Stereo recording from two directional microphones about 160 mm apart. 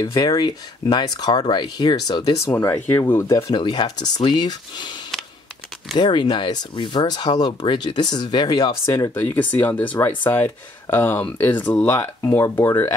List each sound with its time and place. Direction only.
0.0 s speech: 25° left (ahead or behind)
5.9 s speech: 30° left (ahead or behind)